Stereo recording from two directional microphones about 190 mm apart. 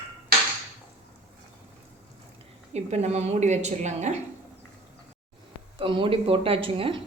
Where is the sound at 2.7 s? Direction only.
35° right (ahead or behind).